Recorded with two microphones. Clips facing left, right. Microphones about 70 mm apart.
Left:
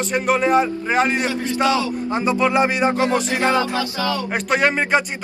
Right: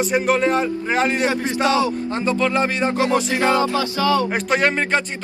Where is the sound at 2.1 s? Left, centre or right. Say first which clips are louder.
Left 2 dB; centre.